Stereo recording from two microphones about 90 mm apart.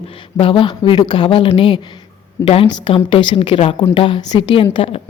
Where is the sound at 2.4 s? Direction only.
90° left.